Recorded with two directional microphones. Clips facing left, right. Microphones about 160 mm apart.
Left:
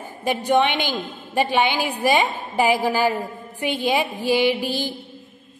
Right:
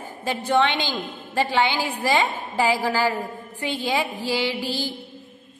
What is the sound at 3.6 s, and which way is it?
Mantra, 20° left (ahead or behind).